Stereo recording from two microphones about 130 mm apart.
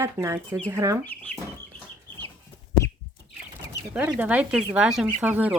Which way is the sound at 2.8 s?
25° left (ahead or behind).